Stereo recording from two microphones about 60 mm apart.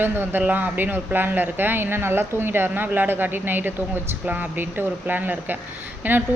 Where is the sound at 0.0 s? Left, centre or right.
Right.